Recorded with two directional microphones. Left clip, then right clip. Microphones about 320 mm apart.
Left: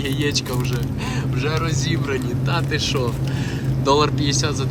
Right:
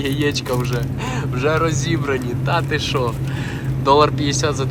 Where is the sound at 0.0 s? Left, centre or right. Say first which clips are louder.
Right 2 dB; centre.